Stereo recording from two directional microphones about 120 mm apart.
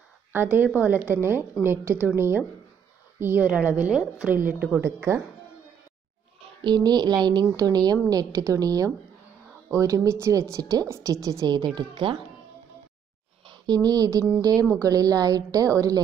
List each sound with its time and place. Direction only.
0.3 s a woman's voice: 20° right (ahead or behind)
6.6 s a woman's voice: 35° right (ahead or behind)
13.5 s a woman's voice: 35° right (ahead or behind)